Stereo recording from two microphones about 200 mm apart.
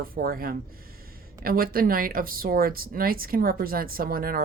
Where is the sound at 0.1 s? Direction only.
45° right (ahead or behind).